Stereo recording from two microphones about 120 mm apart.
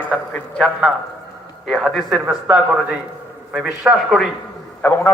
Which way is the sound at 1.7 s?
Centre (ahead or behind).